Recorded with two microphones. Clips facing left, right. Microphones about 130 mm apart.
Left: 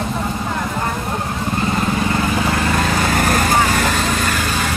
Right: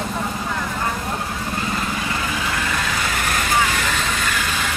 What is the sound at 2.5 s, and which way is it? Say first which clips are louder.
Vehicle: left 6 dB; 45° left (ahead or behind).